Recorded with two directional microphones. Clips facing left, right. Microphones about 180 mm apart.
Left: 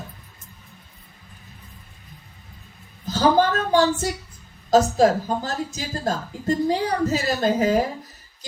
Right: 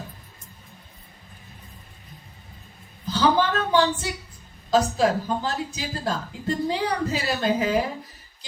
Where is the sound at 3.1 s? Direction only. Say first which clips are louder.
Left 3 dB; 45° left (ahead or behind).